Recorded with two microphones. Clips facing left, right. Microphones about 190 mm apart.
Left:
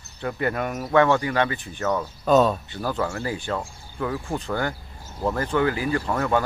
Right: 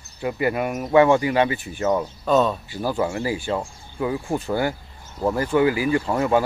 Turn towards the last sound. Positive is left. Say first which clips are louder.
# right 3 dB
turn(degrees=-15)  # may be behind; listen again after turning